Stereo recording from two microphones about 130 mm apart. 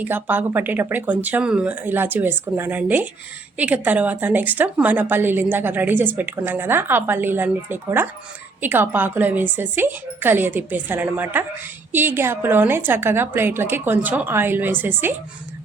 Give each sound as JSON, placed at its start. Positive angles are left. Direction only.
{"t": 0.0, "sound": "a woman's voice", "side_deg": -15}